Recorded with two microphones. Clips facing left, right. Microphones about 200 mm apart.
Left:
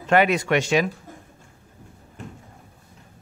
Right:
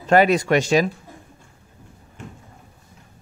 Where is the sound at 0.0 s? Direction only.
35° right (ahead or behind).